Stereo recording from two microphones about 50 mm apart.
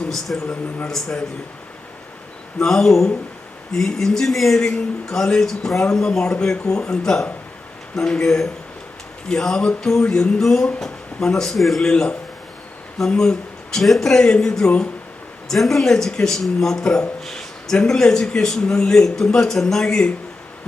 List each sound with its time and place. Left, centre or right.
0.1 s a man's voice: centre
2.6 s a man's voice: centre
11.8 s a man's voice: centre
15.4 s a man's voice: centre
17.2 s a sound: centre
17.8 s a man's voice: centre